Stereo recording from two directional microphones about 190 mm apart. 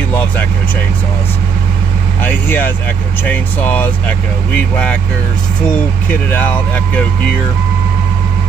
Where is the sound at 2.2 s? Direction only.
10° left (ahead or behind).